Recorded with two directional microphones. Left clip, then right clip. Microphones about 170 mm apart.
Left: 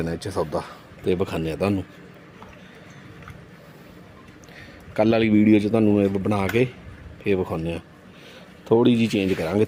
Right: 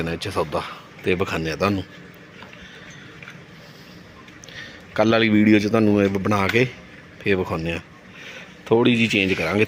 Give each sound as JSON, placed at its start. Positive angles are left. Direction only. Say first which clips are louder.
{"t": 0.3, "sound": "speech", "louder": "right 2 dB", "side_deg": 0}
{"t": 1.0, "sound": "a man's voice", "louder": "right 2 dB", "side_deg": 20}
{"t": 4.5, "sound": "a man's voice", "louder": "right 2 dB", "side_deg": 20}